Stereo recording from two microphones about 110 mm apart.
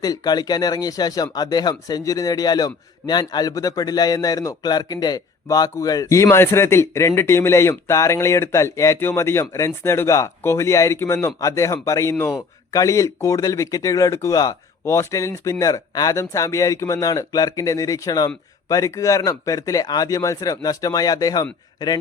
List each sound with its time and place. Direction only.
0.0 s speech: 35° left (ahead or behind)